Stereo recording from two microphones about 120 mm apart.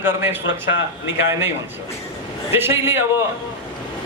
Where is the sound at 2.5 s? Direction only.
20° right (ahead or behind).